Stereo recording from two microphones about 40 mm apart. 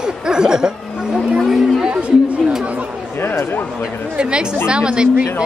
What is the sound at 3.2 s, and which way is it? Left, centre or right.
Speech, left.